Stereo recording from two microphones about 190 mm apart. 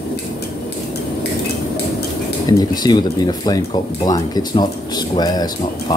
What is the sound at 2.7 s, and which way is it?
Speech, 20° left (ahead or behind).